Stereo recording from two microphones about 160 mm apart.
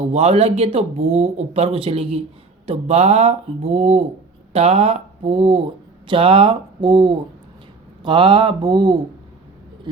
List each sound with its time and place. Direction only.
0.1 s speech: 40° right (ahead or behind)